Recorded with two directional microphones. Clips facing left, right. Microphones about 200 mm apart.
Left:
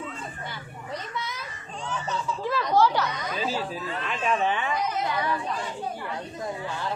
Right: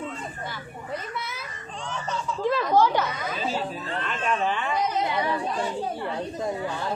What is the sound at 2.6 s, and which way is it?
Speech, 15° right (ahead or behind).